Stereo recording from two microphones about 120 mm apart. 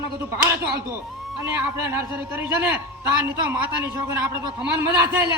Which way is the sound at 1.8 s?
20° right (ahead or behind).